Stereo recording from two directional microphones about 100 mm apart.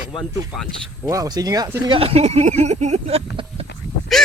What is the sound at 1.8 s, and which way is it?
Speech, 70° right (ahead or behind).